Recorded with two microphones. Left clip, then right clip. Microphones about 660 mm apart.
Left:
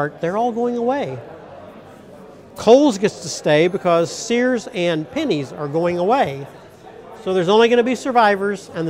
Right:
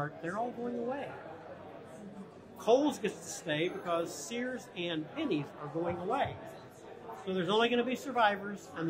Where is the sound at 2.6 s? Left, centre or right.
Left.